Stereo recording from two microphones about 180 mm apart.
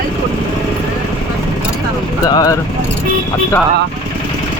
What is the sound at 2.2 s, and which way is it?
Speech, 20° left (ahead or behind).